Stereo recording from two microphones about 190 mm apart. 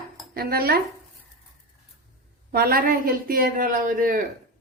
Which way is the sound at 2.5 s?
50° right (ahead or behind).